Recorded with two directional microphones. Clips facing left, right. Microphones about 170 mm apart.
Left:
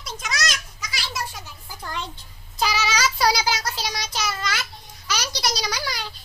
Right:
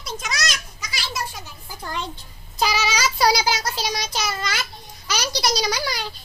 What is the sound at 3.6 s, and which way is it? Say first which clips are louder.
Child singing: right 3 dB; 30° right (ahead or behind).